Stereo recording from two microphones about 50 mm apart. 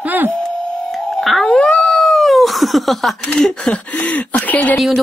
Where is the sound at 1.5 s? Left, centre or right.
Centre.